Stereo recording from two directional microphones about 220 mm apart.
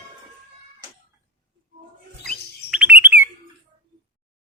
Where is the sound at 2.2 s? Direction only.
5° right (ahead or behind).